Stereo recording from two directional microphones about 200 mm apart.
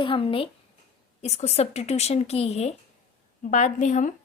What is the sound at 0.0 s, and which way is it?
A woman's voice, 25° left (ahead or behind).